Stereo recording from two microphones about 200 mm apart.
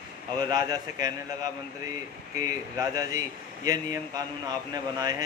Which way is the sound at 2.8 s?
15° right (ahead or behind).